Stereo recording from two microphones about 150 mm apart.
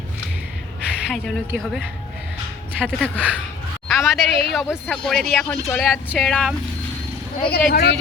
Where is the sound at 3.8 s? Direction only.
Centre (ahead or behind).